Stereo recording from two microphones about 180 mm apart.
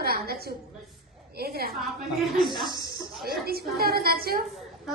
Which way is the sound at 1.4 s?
60° right (ahead or behind).